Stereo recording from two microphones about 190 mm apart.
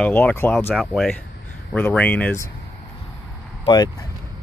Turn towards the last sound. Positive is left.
turn(degrees=20)  # may be behind; listen again after turning